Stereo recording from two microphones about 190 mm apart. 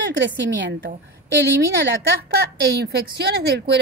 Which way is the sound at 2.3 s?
60° right (ahead or behind).